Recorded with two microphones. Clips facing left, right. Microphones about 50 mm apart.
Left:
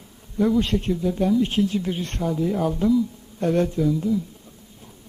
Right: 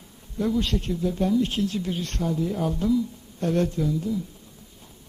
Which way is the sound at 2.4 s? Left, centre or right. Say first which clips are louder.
Left 6 dB; centre.